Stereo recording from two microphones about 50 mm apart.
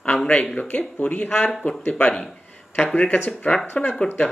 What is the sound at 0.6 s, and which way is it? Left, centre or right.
Speech, left.